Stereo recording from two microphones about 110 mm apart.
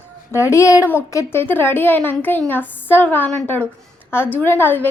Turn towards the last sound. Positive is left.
turn(degrees=20)  # may be behind; listen again after turning